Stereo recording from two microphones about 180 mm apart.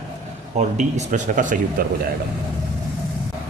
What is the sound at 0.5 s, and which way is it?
Speech, 40° right (ahead or behind).